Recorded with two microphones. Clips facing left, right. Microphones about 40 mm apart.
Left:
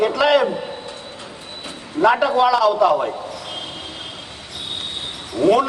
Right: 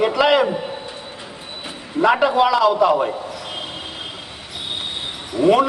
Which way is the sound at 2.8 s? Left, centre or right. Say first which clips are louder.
Even; centre.